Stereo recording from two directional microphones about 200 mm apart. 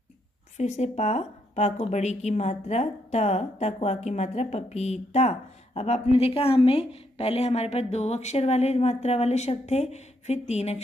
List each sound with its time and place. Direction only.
0.6 s a woman's voice: 35° left (ahead or behind)